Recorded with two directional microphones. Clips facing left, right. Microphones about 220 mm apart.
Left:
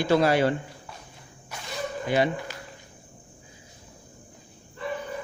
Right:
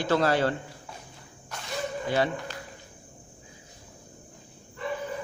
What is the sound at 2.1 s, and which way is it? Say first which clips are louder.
Speech: left 3 dB; 15° left (ahead or behind).